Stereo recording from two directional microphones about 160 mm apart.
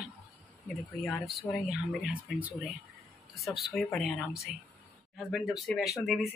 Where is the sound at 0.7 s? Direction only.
Centre (ahead or behind).